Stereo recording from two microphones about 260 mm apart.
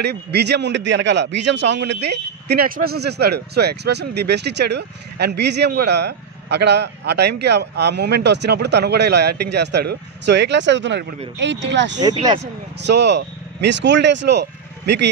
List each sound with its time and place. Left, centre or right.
0.0 s a man's voice: right
12.0 s speech: centre
12.8 s speech: right